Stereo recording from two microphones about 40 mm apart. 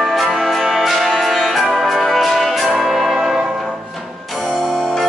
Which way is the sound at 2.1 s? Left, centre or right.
Centre.